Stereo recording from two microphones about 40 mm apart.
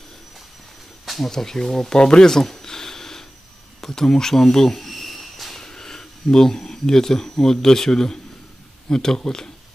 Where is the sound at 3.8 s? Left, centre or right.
Centre.